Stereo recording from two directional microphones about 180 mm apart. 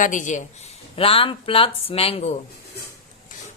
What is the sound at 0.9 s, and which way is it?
Speech, 30° left (ahead or behind).